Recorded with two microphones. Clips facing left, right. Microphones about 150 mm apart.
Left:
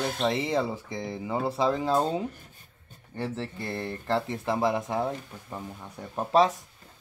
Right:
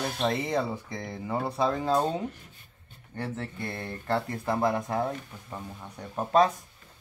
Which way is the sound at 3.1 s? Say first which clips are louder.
Left 2 dB; 30° left (ahead or behind).